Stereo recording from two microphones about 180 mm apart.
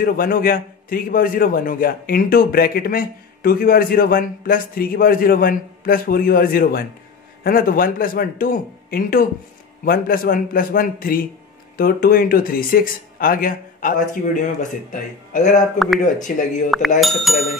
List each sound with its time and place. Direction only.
0.0 s a man's voice: 55° left (ahead or behind)
17.0 s speech: centre (ahead or behind)